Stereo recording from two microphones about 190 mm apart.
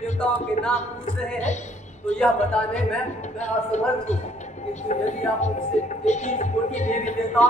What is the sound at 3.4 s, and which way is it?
Speech, 35° left (ahead or behind).